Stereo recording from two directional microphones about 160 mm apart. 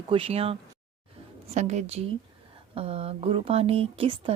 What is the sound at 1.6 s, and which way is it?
A woman's voice, 45° right (ahead or behind).